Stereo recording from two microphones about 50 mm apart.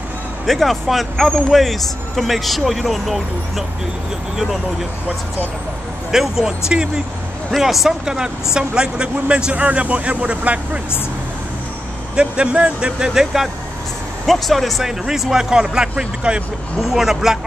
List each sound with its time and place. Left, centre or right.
0.5 s speech: centre
6.1 s speech: centre
7.5 s speech: centre; by 10.8 s right
12.2 s speech: right
14.2 s speech: centre